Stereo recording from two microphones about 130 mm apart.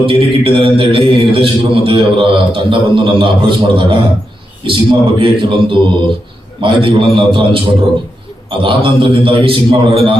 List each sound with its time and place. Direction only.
0.0 s a man's voice: 45° right (ahead or behind)